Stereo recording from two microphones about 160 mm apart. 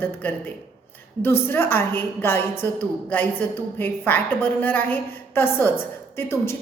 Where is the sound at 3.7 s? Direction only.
10° left (ahead or behind).